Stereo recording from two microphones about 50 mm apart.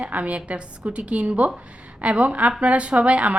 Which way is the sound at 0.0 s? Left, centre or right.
Right.